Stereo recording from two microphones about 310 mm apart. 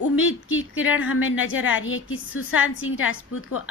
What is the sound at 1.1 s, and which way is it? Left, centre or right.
A woman's voice, left.